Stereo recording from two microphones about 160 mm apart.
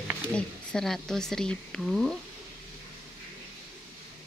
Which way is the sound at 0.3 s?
5° left (ahead or behind).